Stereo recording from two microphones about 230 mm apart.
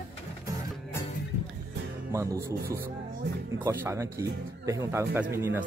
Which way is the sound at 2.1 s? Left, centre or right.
Centre.